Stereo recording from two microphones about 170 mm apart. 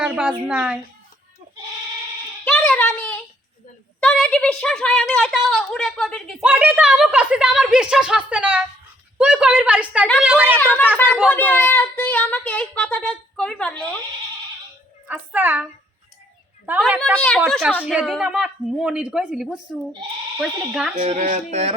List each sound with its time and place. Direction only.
0.0 s a sound: 10° right (ahead or behind)
0.4 s a woman's voice: 5° right (ahead or behind)
2.4 s a sound: 5° left (ahead or behind)
4.0 s a woman's voice: 5° left (ahead or behind)
6.4 s a woman's voice: 10° right (ahead or behind)
10.6 s speech: 10° left (ahead or behind)
15.0 s a woman's voice: 10° right (ahead or behind)
17.2 s a woman's voice: 5° left (ahead or behind)
21.1 s speech: 45° right (ahead or behind)